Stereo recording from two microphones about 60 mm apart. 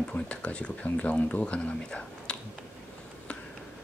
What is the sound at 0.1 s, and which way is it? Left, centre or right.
Speech, left.